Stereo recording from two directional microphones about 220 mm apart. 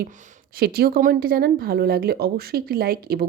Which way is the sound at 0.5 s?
45° right (ahead or behind).